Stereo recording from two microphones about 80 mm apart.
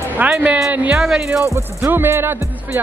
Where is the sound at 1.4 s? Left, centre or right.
Right.